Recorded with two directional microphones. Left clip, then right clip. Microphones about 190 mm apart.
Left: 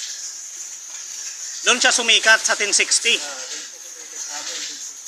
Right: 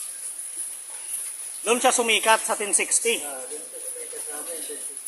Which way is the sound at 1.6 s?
20° right (ahead or behind).